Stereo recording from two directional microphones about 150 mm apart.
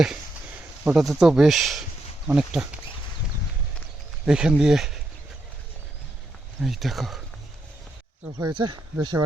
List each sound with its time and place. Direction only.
0.9 s speech: 5° right (ahead or behind)
4.3 s speech: 5° right (ahead or behind)
6.6 s speech: centre (ahead or behind)
8.4 s speech: 30° right (ahead or behind)